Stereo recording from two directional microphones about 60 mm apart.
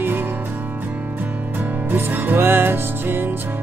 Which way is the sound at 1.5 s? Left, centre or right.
Right.